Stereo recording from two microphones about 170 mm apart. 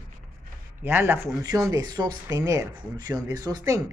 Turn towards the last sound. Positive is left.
turn(degrees=-20)  # may be behind; listen again after turning